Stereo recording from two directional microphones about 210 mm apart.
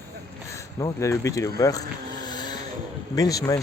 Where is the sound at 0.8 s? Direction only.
15° left (ahead or behind).